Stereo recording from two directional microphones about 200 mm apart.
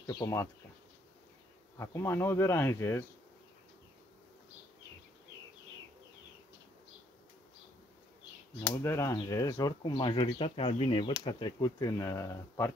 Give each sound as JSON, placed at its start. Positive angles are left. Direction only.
{"t": 0.0, "sound": "speech", "side_deg": 20}
{"t": 1.8, "sound": "speech", "side_deg": 15}
{"t": 8.6, "sound": "speech", "side_deg": 15}